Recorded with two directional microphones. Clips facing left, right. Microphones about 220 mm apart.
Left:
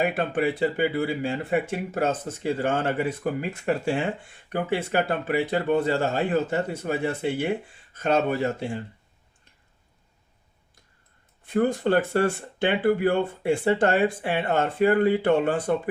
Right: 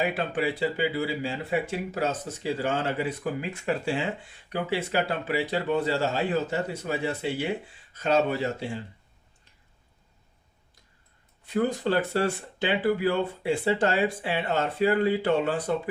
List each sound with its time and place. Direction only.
0.0 s speech: 50° left (ahead or behind)
11.4 s speech: 50° left (ahead or behind)